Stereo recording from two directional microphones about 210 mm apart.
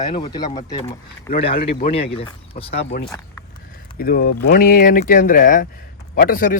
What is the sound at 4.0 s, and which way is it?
A man's voice, 45° left (ahead or behind).